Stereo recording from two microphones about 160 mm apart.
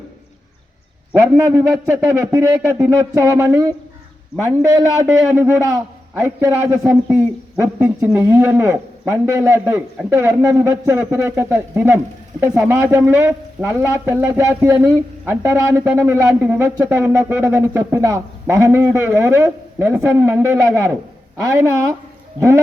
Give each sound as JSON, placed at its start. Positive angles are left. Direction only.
{"t": 1.2, "sound": "a man's voice", "side_deg": -15}
{"t": 22.4, "sound": "speech", "side_deg": -15}